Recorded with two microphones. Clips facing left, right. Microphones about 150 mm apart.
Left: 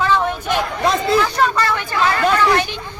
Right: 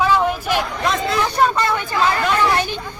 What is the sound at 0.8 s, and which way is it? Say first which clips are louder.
Speech: left 3 dB; 30° left (ahead or behind).